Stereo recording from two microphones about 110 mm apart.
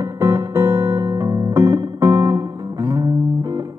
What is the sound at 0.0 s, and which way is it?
Music, 20° right (ahead or behind).